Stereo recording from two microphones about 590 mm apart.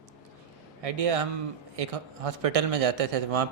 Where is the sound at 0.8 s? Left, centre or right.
Right.